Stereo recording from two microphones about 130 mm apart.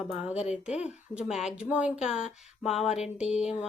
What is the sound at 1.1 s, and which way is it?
A woman's voice, 5° right (ahead or behind).